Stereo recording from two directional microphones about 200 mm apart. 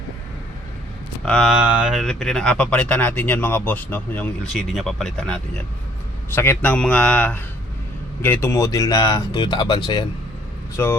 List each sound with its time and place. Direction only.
1.2 s a man's voice: 5° left (ahead or behind); by 10.1 s 20° left (ahead or behind)